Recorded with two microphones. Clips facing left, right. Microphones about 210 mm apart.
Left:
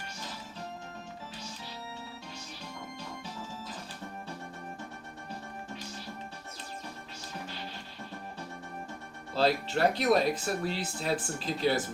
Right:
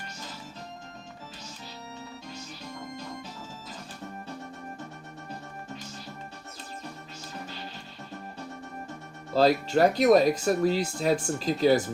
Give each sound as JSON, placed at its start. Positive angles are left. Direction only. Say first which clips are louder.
{"t": 9.3, "sound": "speech", "louder": "right 6 dB", "side_deg": -40}